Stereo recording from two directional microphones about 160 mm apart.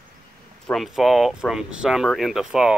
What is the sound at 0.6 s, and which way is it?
Speech, centre (ahead or behind).